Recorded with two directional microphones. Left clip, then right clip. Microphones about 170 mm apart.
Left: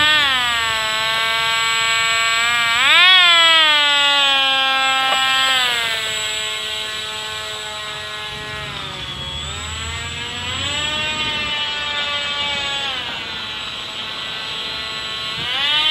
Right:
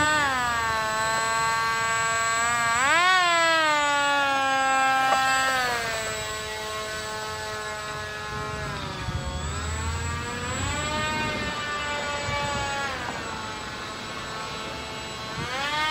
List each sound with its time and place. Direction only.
0.0 s fire alarm: 15° right (ahead or behind)